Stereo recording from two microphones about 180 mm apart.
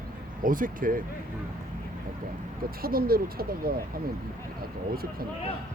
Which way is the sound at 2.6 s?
55° right (ahead or behind).